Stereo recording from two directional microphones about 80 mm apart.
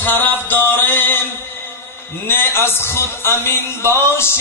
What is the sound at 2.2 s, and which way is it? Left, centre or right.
A man's voice, left.